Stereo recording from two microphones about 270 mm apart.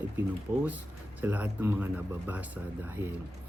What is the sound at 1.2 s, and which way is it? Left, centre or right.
Speech, centre.